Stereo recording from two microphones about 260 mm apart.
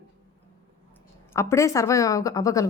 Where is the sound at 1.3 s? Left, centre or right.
Centre.